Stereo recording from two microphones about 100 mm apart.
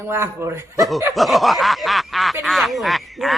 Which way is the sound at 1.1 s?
Centre (ahead or behind).